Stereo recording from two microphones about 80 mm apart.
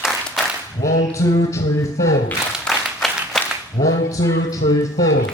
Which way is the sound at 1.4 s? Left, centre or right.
Left.